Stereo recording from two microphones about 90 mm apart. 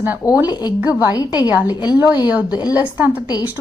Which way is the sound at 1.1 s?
45° left (ahead or behind).